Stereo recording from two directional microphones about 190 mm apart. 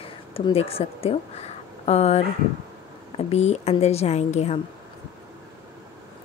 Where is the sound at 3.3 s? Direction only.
35° left (ahead or behind).